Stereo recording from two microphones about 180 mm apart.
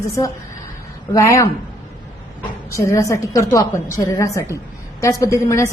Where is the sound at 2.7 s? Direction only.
15° left (ahead or behind).